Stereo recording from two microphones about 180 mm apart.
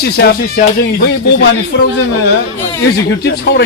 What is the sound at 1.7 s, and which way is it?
Speech, 90° left.